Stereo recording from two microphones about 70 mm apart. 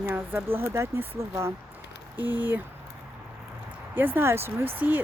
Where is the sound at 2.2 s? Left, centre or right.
Right.